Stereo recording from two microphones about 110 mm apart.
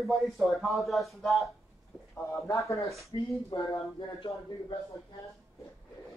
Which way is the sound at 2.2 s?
25° left (ahead or behind).